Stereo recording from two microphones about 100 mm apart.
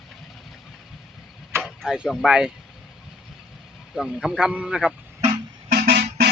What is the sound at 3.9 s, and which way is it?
Speech, 5° right (ahead or behind).